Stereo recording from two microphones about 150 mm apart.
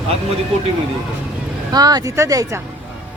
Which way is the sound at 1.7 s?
25° right (ahead or behind).